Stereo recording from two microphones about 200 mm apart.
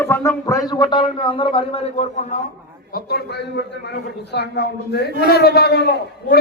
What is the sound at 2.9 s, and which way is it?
A man's voice, 50° left (ahead or behind).